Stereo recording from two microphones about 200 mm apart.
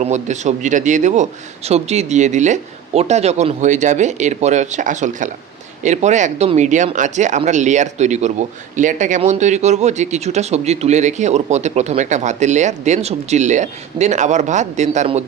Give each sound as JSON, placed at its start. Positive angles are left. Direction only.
{"t": 0.0, "sound": "speech", "side_deg": -35}